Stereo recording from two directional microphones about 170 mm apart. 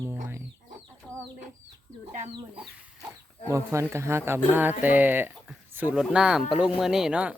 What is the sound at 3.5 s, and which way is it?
Speech, 15° right (ahead or behind).